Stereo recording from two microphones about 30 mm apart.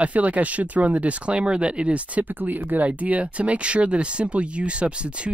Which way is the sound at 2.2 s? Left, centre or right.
Right.